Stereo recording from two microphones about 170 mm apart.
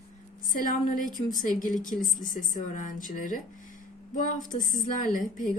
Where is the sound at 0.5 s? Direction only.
55° left (ahead or behind).